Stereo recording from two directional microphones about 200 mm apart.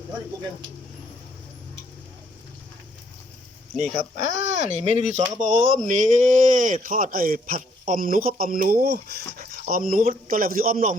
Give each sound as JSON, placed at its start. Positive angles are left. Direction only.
{"t": 4.2, "sound": "speech", "side_deg": -35}